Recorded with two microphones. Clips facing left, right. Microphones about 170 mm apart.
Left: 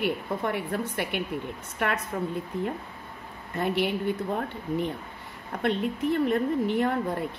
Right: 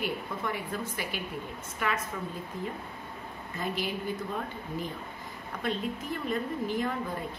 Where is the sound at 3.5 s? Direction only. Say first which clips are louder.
Left 7 dB; 65° left (ahead or behind).